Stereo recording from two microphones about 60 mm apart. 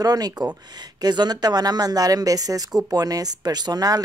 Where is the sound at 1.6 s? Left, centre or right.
Right.